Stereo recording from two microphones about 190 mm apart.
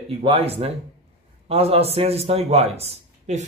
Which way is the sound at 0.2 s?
30° right (ahead or behind).